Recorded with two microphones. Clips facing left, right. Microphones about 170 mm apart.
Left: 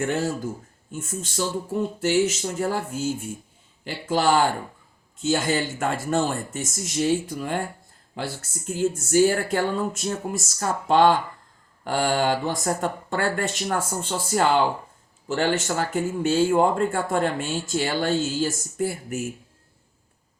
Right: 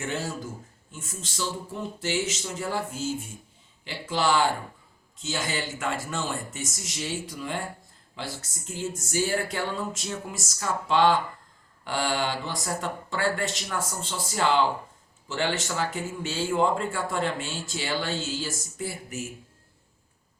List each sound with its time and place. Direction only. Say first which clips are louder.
0.9 s a man's voice: left 9 dB; 50° left (ahead or behind)